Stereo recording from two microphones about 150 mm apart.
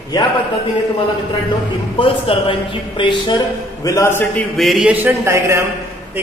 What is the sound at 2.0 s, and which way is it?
A man's voice, 35° left (ahead or behind).